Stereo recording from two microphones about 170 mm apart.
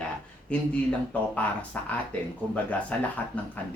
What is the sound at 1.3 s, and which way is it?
A man's voice, 10° left (ahead or behind).